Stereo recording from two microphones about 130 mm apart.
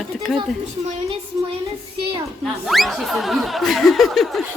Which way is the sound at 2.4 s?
Centre (ahead or behind).